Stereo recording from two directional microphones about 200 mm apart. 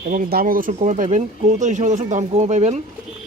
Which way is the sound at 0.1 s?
45° right (ahead or behind).